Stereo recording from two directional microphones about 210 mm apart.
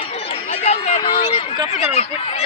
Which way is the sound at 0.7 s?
30° left (ahead or behind).